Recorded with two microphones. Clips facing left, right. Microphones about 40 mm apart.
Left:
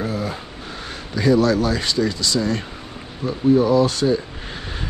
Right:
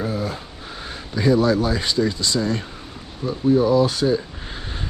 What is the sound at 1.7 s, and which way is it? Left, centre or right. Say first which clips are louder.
Speech: even; left.